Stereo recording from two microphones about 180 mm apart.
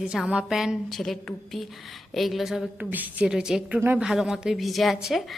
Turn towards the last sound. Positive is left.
turn(degrees=0)  # may be behind; listen again after turning